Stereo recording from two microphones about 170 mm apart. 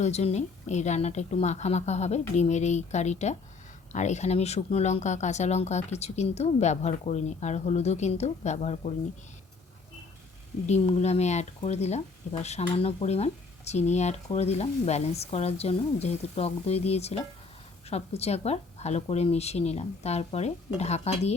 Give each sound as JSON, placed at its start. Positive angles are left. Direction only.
{"t": 0.0, "sound": "speech", "side_deg": 40}
{"t": 10.7, "sound": "speech", "side_deg": 40}